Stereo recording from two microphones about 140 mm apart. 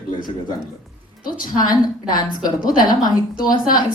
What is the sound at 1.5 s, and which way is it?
A woman's voice, 30° left (ahead or behind).